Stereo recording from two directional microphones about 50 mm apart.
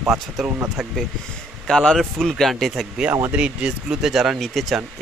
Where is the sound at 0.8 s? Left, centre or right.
Centre.